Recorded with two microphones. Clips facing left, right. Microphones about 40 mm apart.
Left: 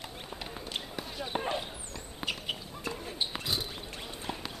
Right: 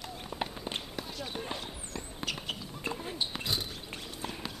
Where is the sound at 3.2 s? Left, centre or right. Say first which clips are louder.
Left 3 dB; centre.